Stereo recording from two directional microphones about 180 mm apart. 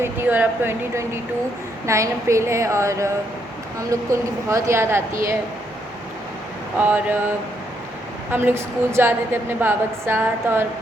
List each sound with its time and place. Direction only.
0.0 s a woman's voice: 10° right (ahead or behind)
6.7 s a woman's voice: 10° right (ahead or behind)
8.3 s a woman's voice: 10° right (ahead or behind)